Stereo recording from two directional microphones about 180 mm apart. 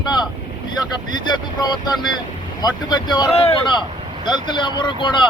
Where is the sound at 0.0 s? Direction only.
25° left (ahead or behind).